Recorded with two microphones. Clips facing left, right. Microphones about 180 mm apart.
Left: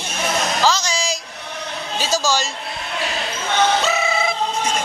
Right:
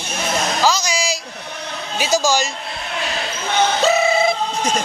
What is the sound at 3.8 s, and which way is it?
Music, 35° right (ahead or behind).